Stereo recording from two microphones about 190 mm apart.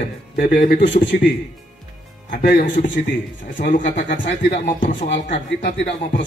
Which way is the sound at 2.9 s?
65° left (ahead or behind).